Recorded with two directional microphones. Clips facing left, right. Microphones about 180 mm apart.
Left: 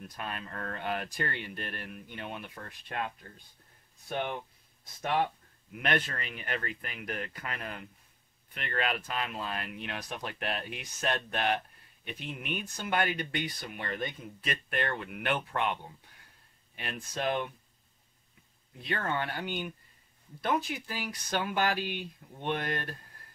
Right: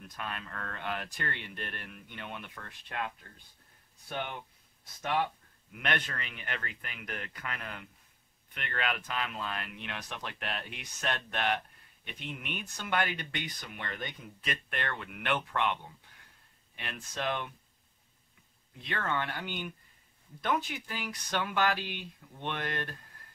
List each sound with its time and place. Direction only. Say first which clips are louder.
0.1 s speech: even; 35° left (ahead or behind)
5.8 s speech: left 3 dB; 35° left (ahead or behind)
18.9 s speech: left 1 dB; 40° left (ahead or behind)